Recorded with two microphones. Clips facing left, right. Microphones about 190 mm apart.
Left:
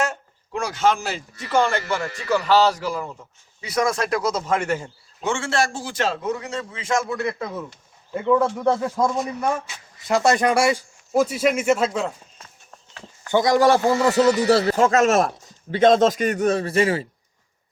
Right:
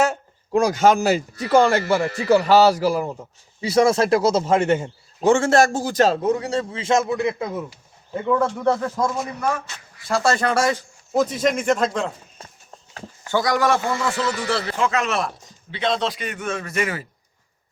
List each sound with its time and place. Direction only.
0.5 s a man's voice: 40° right (ahead or behind)
2.6 s a man's voice: 10° right (ahead or behind)
3.1 s speech: 30° right (ahead or behind)
5.2 s a man's voice: 40° right (ahead or behind); by 7.8 s 10° right (ahead or behind)
8.1 s speech: centre (ahead or behind)
12.4 s run: 30° right (ahead or behind)
13.3 s a man's voice: 25° left (ahead or behind)